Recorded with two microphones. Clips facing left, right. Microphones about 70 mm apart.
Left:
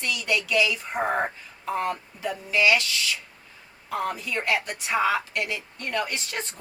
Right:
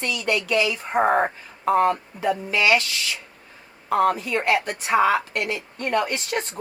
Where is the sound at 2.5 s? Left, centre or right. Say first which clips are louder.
Right 1 dB; right.